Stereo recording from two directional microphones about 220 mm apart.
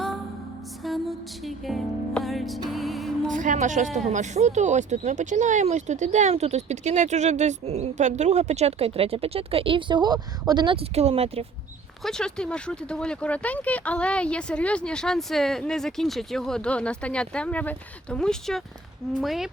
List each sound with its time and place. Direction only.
0.8 s music: centre (ahead or behind)
3.3 s speech: 35° right (ahead or behind)
12.0 s speech: 5° left (ahead or behind)